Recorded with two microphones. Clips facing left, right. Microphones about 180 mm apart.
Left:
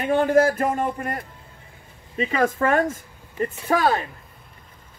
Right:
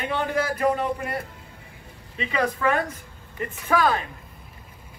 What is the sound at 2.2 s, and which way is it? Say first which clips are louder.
Speech: left 4 dB; 45° left (ahead or behind).